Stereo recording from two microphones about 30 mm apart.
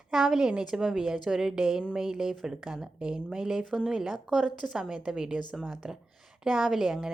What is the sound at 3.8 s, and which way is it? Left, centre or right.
A woman's voice, centre.